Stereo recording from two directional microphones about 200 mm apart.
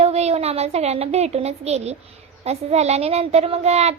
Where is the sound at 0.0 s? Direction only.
30° right (ahead or behind).